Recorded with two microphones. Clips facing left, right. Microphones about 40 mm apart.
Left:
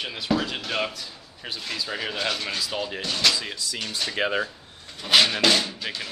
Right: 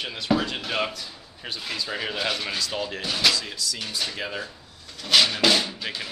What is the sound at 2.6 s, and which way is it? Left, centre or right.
Speech, centre.